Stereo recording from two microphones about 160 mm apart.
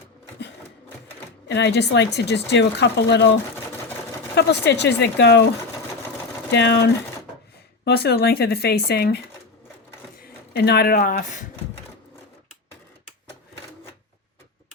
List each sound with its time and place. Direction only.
1.5 s a woman's voice: 90° left
4.4 s a woman's voice: 90° left
6.5 s a woman's voice: 90° left
7.9 s speech: 80° left; by 11.4 s 55° left (ahead or behind)